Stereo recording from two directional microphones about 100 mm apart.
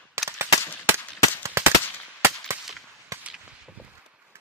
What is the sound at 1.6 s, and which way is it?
Machine gun, 25° right (ahead or behind).